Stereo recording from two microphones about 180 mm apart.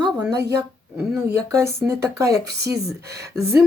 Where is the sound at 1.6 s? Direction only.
15° right (ahead or behind).